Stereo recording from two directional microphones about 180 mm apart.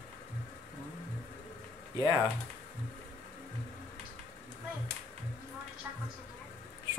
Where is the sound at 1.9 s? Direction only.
15° right (ahead or behind).